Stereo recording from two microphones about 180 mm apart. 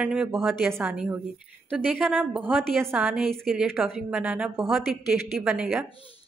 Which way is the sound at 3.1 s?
Centre (ahead or behind).